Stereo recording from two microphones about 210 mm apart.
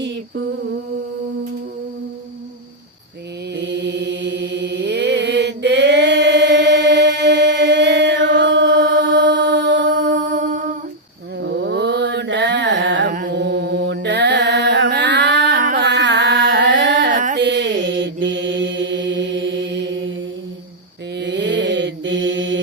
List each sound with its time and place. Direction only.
0.0 s a sound: 55° right (ahead or behind)
3.5 s chant: 55° right (ahead or behind)
9.9 s mantra: 40° right (ahead or behind)
11.3 s mantra: 60° right (ahead or behind)
15.5 s a sound: 45° right (ahead or behind)
17.3 s mantra: 55° right (ahead or behind)
21.2 s mantra: 55° right (ahead or behind)